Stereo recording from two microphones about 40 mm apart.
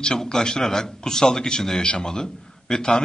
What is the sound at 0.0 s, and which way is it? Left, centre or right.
A man's voice, centre.